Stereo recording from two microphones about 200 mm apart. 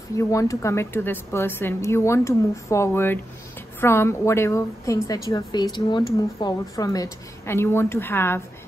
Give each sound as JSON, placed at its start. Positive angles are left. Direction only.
{"t": 0.2, "sound": "speech", "side_deg": 15}